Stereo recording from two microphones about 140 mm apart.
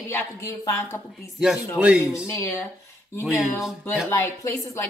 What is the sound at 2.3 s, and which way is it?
Speech, 20° left (ahead or behind).